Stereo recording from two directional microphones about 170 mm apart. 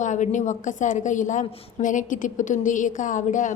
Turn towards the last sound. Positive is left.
turn(degrees=50)  # may be behind; listen again after turning